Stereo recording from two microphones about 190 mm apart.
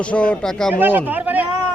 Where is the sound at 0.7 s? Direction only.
10° right (ahead or behind).